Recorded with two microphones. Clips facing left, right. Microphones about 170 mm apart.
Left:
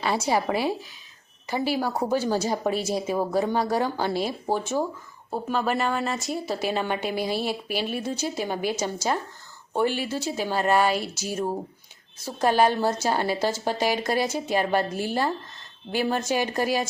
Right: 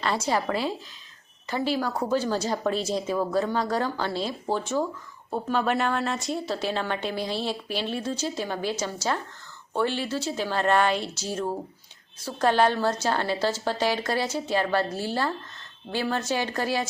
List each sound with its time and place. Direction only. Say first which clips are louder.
0.0 s speech: left 2 dB; 10° left (ahead or behind)